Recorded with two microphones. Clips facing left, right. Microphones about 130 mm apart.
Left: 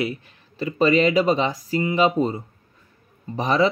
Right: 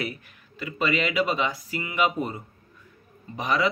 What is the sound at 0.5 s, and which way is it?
Speech, 35° left (ahead or behind).